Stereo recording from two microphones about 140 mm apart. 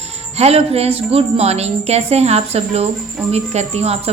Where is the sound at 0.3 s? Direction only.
45° right (ahead or behind).